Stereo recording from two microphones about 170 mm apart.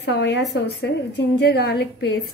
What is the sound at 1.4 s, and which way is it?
Speech, 75° left (ahead or behind).